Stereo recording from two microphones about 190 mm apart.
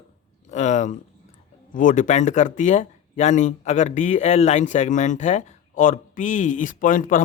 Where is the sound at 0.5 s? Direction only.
40° left (ahead or behind).